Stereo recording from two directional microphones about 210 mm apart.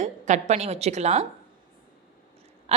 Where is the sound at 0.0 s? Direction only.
35° right (ahead or behind).